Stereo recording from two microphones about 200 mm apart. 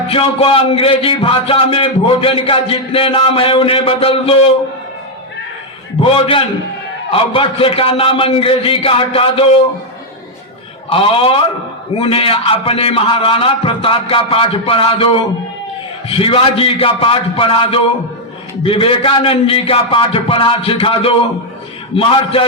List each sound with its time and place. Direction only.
0.1 s a man's voice: 30° left (ahead or behind)
6.0 s a man's voice: 25° left (ahead or behind)
10.9 s a man's voice: 30° left (ahead or behind)